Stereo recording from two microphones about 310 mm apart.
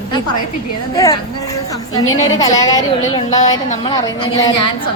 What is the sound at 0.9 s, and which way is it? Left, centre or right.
A woman's voice, centre.